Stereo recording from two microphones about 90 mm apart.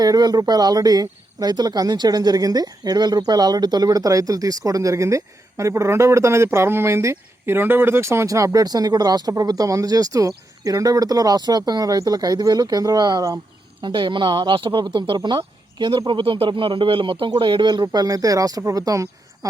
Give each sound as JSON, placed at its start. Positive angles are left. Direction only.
{"t": 0.0, "sound": "speech", "side_deg": -45}
{"t": 13.8, "sound": "speech", "side_deg": -65}